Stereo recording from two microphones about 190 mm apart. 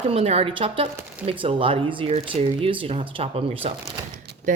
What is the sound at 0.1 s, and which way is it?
A woman's voice, 30° right (ahead or behind).